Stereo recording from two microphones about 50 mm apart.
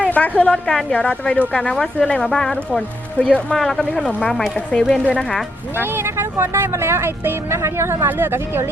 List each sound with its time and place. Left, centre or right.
0.0 s a woman's voice: left
2.2 s speech: centre
3.2 s speech: left
3.5 s speech: centre; by 5.2 s left
5.7 s speech: right